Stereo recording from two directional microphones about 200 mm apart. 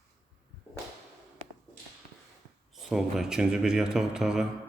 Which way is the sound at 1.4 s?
35° right (ahead or behind).